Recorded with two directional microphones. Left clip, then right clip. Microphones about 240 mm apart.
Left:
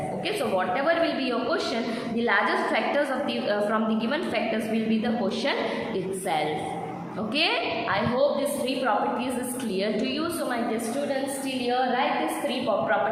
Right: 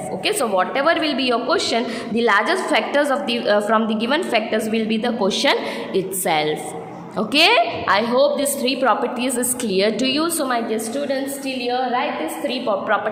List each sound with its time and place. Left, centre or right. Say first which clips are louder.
0.3 s a woman's voice: right 7 dB; right